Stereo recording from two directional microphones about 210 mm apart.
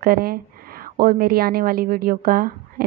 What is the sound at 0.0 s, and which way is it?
A woman's voice, 45° right (ahead or behind).